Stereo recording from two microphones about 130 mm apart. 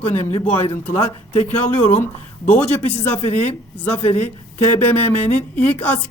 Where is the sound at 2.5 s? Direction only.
15° left (ahead or behind).